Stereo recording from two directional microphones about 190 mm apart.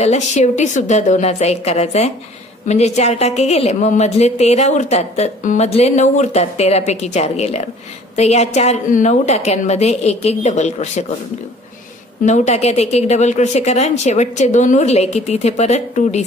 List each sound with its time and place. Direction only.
0.0 s speech: 35° left (ahead or behind)
12.3 s speech: 35° left (ahead or behind)